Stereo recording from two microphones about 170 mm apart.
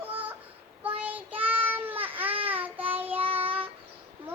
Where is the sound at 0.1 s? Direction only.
10° right (ahead or behind).